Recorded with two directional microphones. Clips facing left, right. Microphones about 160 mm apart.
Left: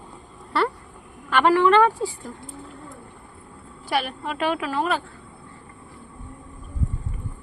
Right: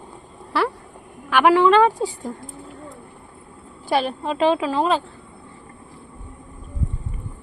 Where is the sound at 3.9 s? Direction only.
25° right (ahead or behind).